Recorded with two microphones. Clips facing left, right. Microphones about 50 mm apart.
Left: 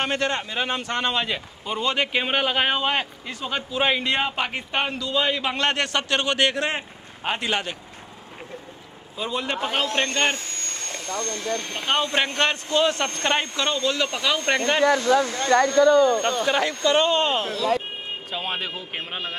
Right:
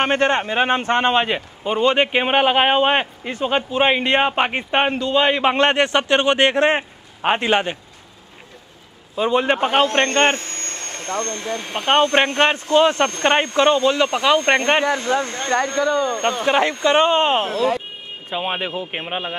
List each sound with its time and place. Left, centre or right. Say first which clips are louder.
0.0 s a man's voice: right 7 dB; right
9.1 s a man's voice: right 9 dB; right
11.3 s speech: right 2 dB; centre
11.8 s a man's voice: right 8 dB; right; by 16.2 s centre
16.4 s speech: right 8 dB; right